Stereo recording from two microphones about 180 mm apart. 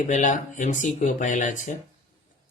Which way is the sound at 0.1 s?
45° left (ahead or behind).